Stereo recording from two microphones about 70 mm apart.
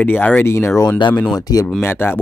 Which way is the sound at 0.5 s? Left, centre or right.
Left.